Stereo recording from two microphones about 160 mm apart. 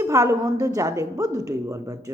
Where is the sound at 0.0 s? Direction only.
20° right (ahead or behind).